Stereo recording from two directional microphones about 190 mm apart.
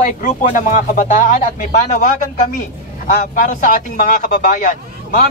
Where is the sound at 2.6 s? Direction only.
40° left (ahead or behind).